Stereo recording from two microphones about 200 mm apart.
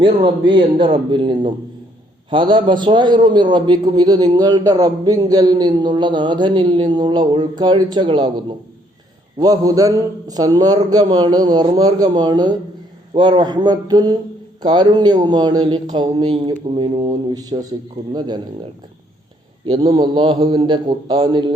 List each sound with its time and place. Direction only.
0.0 s a man's voice: 25° right (ahead or behind)
19.6 s a man's voice: 25° right (ahead or behind)